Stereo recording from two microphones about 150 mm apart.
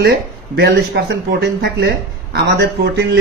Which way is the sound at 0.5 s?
90° right.